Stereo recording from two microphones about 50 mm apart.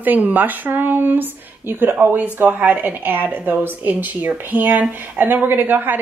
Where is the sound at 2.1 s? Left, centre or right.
Right.